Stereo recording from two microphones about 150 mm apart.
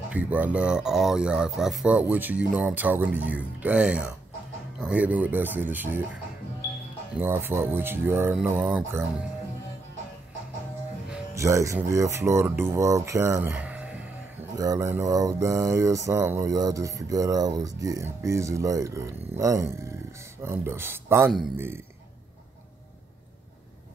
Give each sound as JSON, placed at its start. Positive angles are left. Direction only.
{"t": 0.1, "sound": "speech", "side_deg": -10}
{"t": 7.2, "sound": "speech", "side_deg": -15}
{"t": 11.3, "sound": "speech", "side_deg": -20}
{"t": 13.6, "sound": "music", "side_deg": -10}
{"t": 14.6, "sound": "speech", "side_deg": -20}